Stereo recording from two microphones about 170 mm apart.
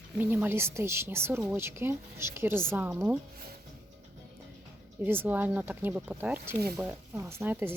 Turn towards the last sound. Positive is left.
turn(degrees=-10)  # may be behind; listen again after turning